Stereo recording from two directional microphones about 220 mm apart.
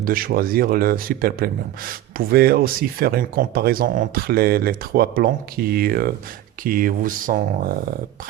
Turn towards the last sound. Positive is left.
turn(degrees=-40)  # may be behind; listen again after turning